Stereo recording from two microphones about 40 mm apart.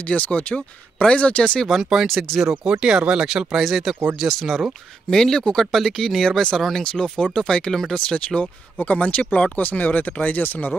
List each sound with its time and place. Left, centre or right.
0.0 s speech: left
1.8 s speech: centre
2.0 s speech: centre
2.6 s speech: right
4.3 s speech: centre
5.1 s speech: centre
6.8 s speech: left
8.4 s speech: left
10.4 s speech: left